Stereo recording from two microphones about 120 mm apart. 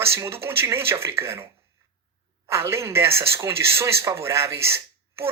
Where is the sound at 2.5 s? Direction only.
25° right (ahead or behind).